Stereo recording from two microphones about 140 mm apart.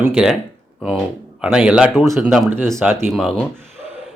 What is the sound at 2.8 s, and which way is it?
Speech, 15° right (ahead or behind).